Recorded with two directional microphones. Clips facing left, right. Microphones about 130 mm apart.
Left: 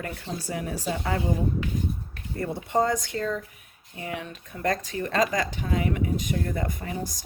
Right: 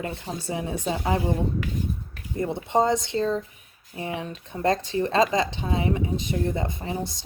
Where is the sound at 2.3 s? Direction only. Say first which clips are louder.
Right 2 dB; 20° right (ahead or behind).